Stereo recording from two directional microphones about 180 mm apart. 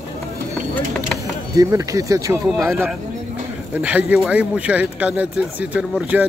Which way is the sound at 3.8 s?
5° right (ahead or behind).